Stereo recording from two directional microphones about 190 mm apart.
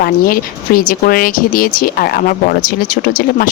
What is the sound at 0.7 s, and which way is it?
Speech, 50° left (ahead or behind).